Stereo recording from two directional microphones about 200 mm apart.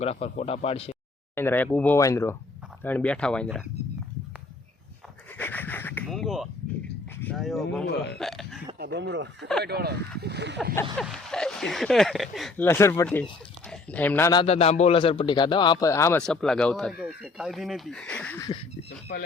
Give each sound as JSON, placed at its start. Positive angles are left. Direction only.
{"t": 0.0, "sound": "speech", "side_deg": 30}
{"t": 1.4, "sound": "speech", "side_deg": 10}
{"t": 5.4, "sound": "a sound", "side_deg": 10}
{"t": 7.2, "sound": "speech", "side_deg": 5}
{"t": 8.8, "sound": "speech", "side_deg": -55}
{"t": 10.9, "sound": "speech", "side_deg": 0}
{"t": 12.6, "sound": "speech", "side_deg": 10}
{"t": 14.4, "sound": "a man's voice", "side_deg": 30}
{"t": 16.2, "sound": "speech", "side_deg": 5}